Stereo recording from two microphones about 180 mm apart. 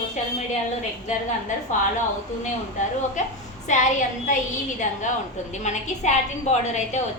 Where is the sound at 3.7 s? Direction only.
45° left (ahead or behind).